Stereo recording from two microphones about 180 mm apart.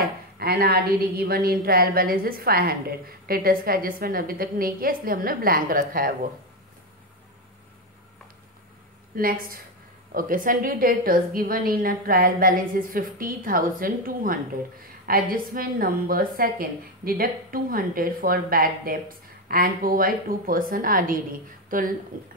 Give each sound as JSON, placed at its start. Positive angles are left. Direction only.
{"t": 0.4, "sound": "a woman's voice", "side_deg": -60}
{"t": 9.1, "sound": "a woman's voice", "side_deg": -55}